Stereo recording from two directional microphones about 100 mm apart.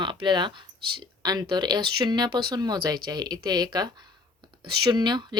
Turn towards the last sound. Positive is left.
turn(degrees=-45)  # may be behind; listen again after turning